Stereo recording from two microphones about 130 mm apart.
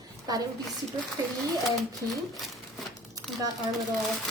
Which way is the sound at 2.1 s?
Centre (ahead or behind).